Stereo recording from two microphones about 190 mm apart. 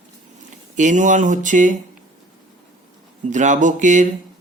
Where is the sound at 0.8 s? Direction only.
40° right (ahead or behind).